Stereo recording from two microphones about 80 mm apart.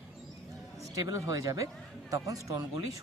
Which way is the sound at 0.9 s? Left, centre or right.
Right.